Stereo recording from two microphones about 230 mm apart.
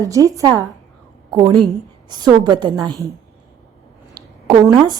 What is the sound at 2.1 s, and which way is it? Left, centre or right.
A woman's voice, centre.